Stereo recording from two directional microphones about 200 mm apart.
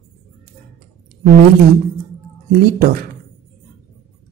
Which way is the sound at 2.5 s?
50° right (ahead or behind).